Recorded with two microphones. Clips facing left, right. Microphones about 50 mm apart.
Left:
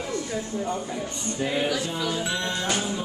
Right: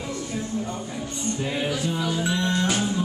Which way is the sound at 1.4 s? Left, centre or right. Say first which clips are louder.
Left 4 dB; centre.